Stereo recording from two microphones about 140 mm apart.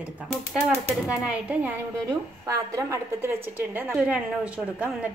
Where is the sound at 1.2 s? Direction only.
10° right (ahead or behind).